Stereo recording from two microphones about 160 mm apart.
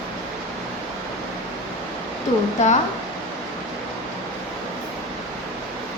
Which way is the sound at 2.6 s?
50° left (ahead or behind).